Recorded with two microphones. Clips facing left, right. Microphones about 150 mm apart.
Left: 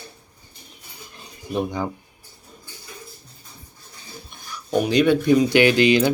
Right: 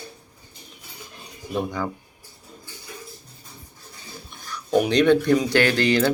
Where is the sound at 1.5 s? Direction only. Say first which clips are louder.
Left 2 dB; 20° left (ahead or behind).